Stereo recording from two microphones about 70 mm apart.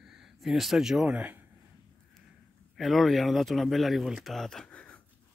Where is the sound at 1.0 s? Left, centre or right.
Right.